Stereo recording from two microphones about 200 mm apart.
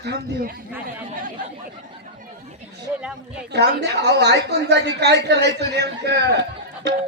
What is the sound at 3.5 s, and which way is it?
A woman's voice, 55° right (ahead or behind).